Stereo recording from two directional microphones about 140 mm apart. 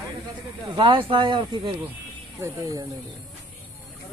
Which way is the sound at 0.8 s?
40° right (ahead or behind).